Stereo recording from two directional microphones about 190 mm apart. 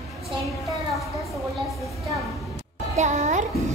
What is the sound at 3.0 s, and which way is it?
Music, 35° right (ahead or behind).